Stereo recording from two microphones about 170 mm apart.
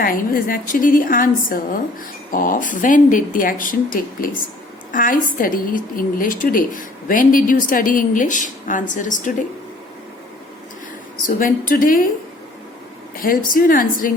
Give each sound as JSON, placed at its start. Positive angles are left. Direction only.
{"t": 0.0, "sound": "a woman's voice", "side_deg": 55}
{"t": 11.3, "sound": "a woman's voice", "side_deg": 55}
{"t": 13.2, "sound": "a woman's voice", "side_deg": 55}